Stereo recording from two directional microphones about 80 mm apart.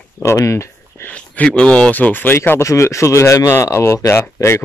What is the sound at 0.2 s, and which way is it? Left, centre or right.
Speech, left.